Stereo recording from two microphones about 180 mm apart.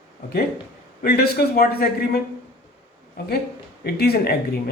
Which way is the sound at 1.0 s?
60° left (ahead or behind).